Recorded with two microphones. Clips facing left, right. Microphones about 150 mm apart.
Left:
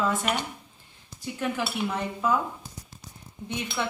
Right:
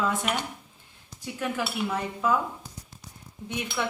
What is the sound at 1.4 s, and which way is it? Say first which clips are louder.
Speech: left 1 dB; 5° right (ahead or behind).